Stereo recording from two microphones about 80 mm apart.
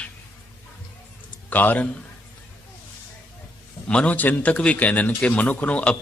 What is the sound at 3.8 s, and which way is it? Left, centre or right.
A man's voice, centre.